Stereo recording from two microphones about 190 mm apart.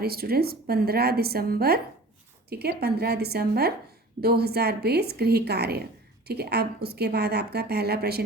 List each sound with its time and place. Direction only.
0.0 s a woman's voice: 55° right (ahead or behind)